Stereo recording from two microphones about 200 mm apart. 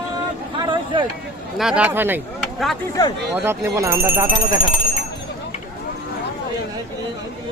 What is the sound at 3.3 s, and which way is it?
Speech, 10° right (ahead or behind).